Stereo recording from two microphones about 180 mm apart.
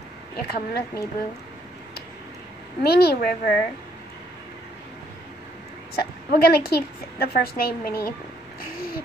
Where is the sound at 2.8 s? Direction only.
60° left (ahead or behind).